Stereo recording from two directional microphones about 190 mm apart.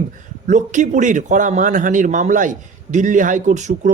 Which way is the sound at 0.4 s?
40° right (ahead or behind).